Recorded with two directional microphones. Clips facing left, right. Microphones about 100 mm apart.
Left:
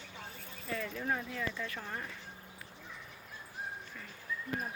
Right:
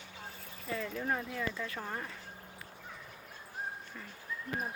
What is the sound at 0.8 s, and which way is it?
Speech, 10° right (ahead or behind).